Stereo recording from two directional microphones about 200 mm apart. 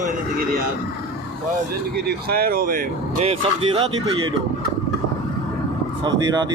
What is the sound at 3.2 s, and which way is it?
Speech, 25° right (ahead or behind).